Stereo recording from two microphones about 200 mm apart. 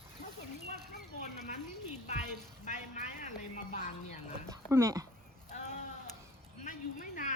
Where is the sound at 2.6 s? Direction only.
35° left (ahead or behind).